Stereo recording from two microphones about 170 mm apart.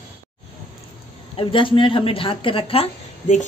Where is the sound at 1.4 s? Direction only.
30° left (ahead or behind).